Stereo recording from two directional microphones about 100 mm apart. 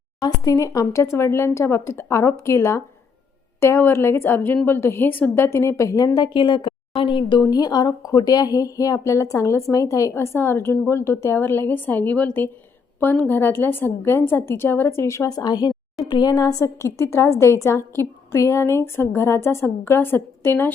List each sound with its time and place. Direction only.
0.4 s a woman's voice: 35° left (ahead or behind)
6.1 s a woman's voice: 50° left (ahead or behind)
7.4 s a woman's voice: 40° left (ahead or behind)
15.4 s a woman's voice: 40° left (ahead or behind)
16.3 s a woman's voice: 35° left (ahead or behind)